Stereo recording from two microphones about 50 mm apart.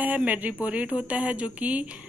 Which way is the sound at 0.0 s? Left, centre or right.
Right.